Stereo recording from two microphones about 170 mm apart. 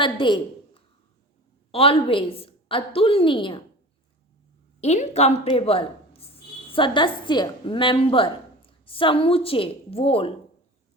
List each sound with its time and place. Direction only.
0.0 s a woman's voice: 30° left (ahead or behind)
4.8 s a woman's voice: 40° left (ahead or behind)